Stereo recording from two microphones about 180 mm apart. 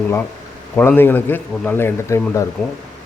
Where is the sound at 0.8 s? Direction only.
10° left (ahead or behind).